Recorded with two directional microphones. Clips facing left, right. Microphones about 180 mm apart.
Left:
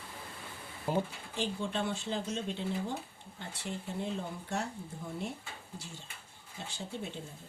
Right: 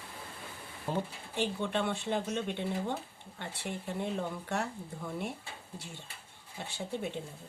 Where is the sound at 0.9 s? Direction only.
10° left (ahead or behind).